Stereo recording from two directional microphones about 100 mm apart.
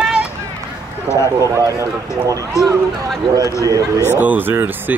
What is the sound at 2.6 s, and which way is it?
Speech, 35° left (ahead or behind).